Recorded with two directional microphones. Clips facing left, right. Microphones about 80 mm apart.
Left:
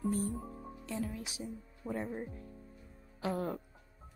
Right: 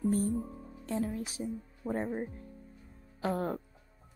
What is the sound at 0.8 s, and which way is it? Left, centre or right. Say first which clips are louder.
A woman's voice: right 5 dB; right.